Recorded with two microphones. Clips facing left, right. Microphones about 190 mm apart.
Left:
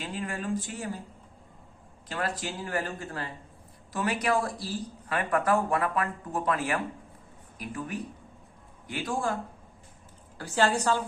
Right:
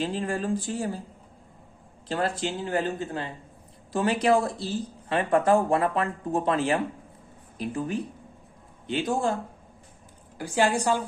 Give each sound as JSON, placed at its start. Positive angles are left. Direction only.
{"t": 0.0, "sound": "speech", "side_deg": -30}
{"t": 2.0, "sound": "a woman's voice", "side_deg": -30}